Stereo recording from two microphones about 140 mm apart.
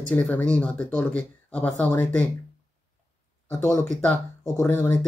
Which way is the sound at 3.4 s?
20° left (ahead or behind).